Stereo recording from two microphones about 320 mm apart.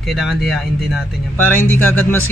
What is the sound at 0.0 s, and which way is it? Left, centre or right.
Speech, centre.